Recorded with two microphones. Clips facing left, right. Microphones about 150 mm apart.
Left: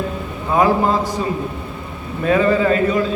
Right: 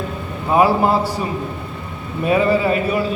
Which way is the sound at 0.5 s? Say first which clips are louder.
Right 1 dB; 10° right (ahead or behind).